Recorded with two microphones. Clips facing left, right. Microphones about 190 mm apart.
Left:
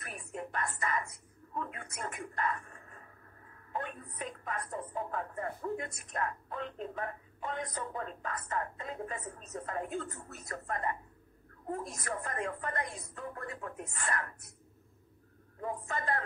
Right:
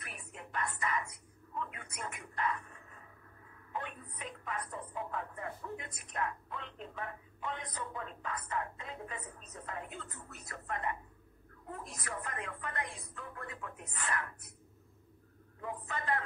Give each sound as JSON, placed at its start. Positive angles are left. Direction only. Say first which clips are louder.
{"t": 0.0, "sound": "a sound", "louder": "left 8 dB", "side_deg": 40}
{"t": 3.7, "sound": "television", "louder": "left 3 dB", "side_deg": 40}
{"t": 9.7, "sound": "a woman's voice", "louder": "left 7 dB", "side_deg": 45}
{"t": 15.6, "sound": "a man's voice", "louder": "left 3 dB", "side_deg": 40}